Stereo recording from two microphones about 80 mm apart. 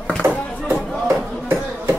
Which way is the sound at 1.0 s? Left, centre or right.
Right.